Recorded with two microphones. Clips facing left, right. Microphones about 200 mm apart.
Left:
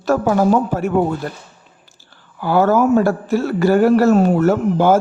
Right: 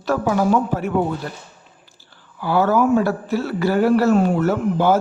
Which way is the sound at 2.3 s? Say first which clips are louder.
Left 3 dB; 45° left (ahead or behind).